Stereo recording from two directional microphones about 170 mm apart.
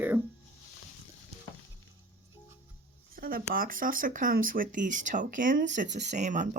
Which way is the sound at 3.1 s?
60° right (ahead or behind).